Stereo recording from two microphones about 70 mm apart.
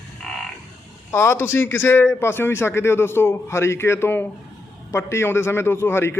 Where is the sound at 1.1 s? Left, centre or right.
Left.